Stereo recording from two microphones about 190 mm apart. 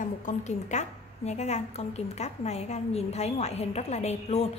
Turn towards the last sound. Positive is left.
turn(degrees=35)  # may be behind; listen again after turning